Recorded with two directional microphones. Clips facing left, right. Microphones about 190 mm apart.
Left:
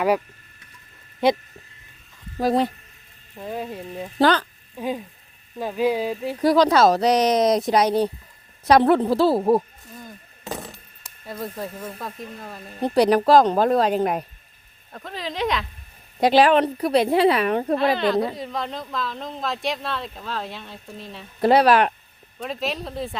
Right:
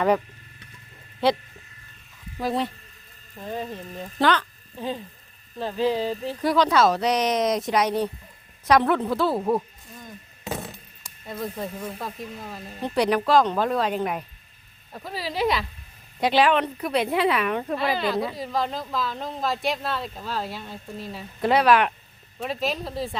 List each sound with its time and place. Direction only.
2.4 s speech: 40° left (ahead or behind)
3.4 s speech: 5° left (ahead or behind)
4.2 s speech: 35° left (ahead or behind)
4.8 s speech: 10° left (ahead or behind)
6.4 s speech: 40° left (ahead or behind)
10.0 s a sound: centre (ahead or behind)
12.8 s speech: 35° left (ahead or behind)
14.9 s speech: 10° right (ahead or behind)
16.2 s speech: 40° left (ahead or behind)
17.7 s speech: 5° right (ahead or behind)
21.4 s speech: 35° left (ahead or behind)
22.4 s speech: centre (ahead or behind)